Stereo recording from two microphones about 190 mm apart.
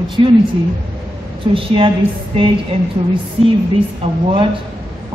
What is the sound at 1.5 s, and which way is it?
A woman's voice, 30° right (ahead or behind).